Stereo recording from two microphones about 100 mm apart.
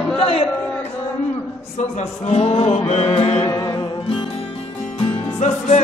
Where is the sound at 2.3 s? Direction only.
90° left.